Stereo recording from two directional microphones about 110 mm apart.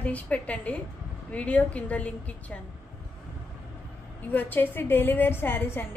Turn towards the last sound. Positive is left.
turn(degrees=20)  # may be behind; listen again after turning